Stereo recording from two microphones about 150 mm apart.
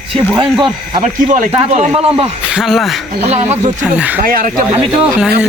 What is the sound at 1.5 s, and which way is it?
Speech, 40° right (ahead or behind).